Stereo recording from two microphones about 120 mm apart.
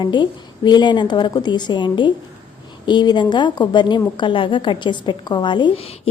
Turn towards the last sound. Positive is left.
turn(degrees=40)  # may be behind; listen again after turning